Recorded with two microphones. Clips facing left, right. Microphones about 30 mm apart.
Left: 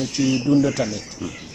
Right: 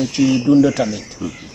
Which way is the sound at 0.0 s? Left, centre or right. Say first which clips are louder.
Right 5 dB; centre.